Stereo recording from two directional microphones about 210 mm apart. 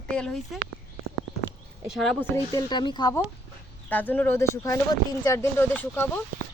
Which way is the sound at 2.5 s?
20° left (ahead or behind).